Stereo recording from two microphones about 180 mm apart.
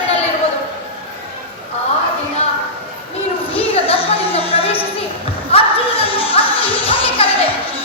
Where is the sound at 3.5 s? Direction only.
30° left (ahead or behind).